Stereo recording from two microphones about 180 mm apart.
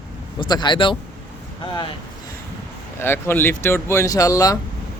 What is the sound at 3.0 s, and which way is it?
Speech, 10° left (ahead or behind).